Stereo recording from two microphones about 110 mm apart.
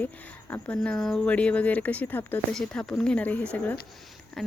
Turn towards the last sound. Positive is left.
turn(degrees=5)  # may be behind; listen again after turning